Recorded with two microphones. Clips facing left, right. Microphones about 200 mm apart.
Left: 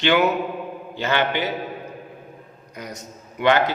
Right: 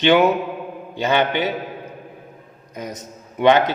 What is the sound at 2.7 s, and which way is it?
Speech, 20° right (ahead or behind).